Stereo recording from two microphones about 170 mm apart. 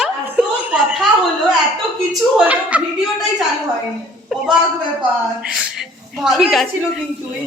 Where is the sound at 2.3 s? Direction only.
10° right (ahead or behind).